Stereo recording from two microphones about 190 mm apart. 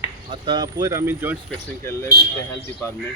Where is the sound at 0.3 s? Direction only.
25° right (ahead or behind).